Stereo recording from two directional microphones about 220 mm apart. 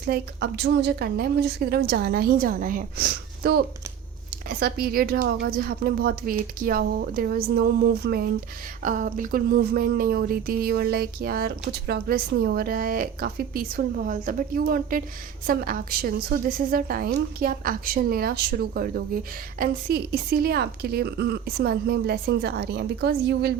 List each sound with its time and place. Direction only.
0.0 s a woman's voice: 45° right (ahead or behind)